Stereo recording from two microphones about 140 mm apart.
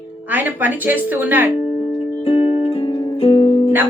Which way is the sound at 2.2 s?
40° left (ahead or behind).